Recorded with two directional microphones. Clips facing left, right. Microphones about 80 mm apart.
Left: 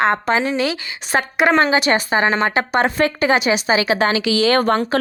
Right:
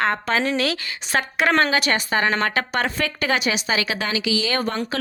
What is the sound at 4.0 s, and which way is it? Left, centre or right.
Speech, left.